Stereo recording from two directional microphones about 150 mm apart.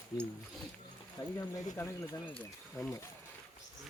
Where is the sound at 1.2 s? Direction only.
25° left (ahead or behind).